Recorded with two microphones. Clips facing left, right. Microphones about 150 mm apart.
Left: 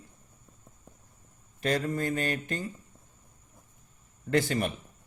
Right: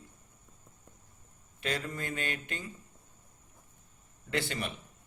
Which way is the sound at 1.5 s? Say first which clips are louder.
Left 7 dB; 40° left (ahead or behind).